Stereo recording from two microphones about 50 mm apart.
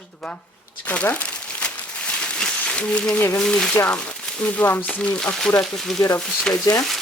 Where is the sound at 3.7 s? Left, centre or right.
Left.